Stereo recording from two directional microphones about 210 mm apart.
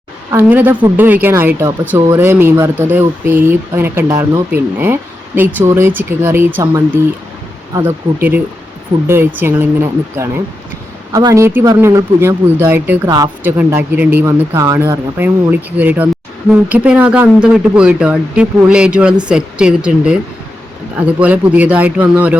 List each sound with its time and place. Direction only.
0.3 s speech: 10° right (ahead or behind)
21.2 s speech: 5° right (ahead or behind)